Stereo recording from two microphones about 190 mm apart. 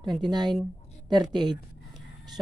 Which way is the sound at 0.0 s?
20° right (ahead or behind).